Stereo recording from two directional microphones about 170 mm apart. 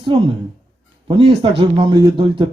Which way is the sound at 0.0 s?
30° right (ahead or behind).